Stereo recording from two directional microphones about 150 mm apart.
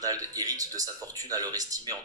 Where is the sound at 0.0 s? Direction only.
25° right (ahead or behind).